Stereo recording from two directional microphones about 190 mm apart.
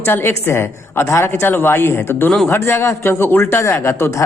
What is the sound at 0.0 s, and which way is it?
A man's voice, 10° left (ahead or behind).